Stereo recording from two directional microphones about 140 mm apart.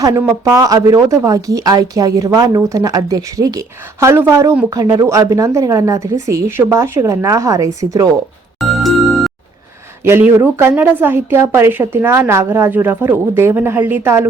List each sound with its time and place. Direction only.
0.4 s speech: 25° right (ahead or behind)
8.6 s music: centre (ahead or behind)
10.0 s a woman's voice: 15° right (ahead or behind)